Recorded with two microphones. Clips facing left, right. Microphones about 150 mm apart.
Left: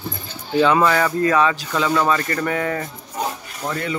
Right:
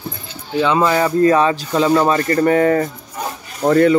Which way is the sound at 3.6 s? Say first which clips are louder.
Right 13 dB; 55° right (ahead or behind).